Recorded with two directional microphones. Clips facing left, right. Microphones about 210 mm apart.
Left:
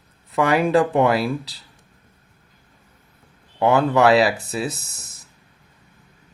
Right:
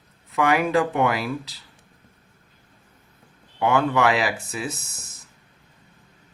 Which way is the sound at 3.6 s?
35° left (ahead or behind).